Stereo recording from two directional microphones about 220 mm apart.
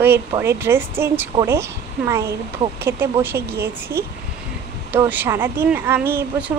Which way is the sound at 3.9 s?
45° right (ahead or behind).